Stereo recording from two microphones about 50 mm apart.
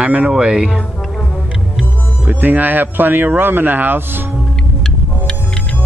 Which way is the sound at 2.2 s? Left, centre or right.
Right.